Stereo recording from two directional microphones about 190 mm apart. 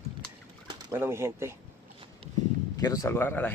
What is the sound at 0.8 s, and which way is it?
Speech, 15° right (ahead or behind).